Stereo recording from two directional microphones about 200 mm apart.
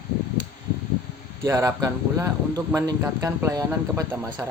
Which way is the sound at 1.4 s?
15° right (ahead or behind).